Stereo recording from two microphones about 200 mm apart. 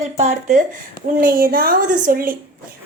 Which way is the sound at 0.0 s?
35° right (ahead or behind).